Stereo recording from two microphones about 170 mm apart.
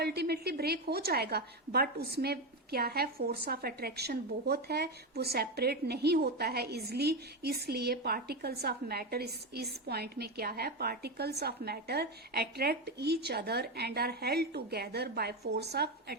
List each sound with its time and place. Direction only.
0.0 s a woman's voice: 70° right (ahead or behind)